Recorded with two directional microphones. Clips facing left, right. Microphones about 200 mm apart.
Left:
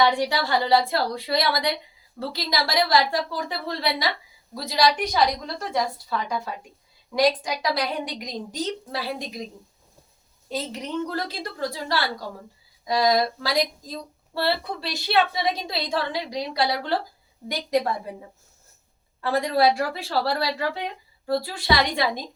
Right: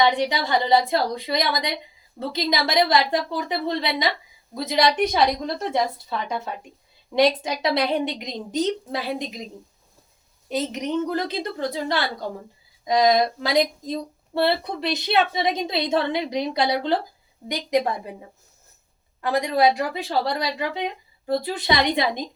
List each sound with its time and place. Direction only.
0.0 s speech: 20° right (ahead or behind)
10.5 s a woman's voice: 20° right (ahead or behind)
19.2 s speech: 15° right (ahead or behind)